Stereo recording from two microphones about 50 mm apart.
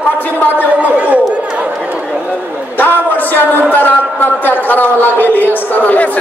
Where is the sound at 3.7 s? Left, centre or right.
Left.